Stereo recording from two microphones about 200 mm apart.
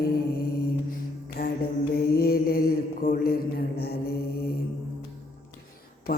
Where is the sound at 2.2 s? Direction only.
50° left (ahead or behind).